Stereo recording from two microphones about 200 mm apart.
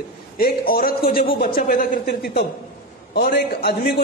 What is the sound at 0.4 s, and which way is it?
A man's voice, 50° left (ahead or behind).